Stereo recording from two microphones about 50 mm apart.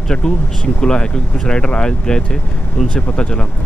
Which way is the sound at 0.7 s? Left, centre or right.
Centre.